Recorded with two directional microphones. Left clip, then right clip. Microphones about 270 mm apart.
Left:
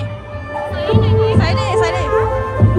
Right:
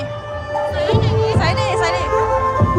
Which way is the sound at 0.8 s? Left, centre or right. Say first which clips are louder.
Left 4 dB; right.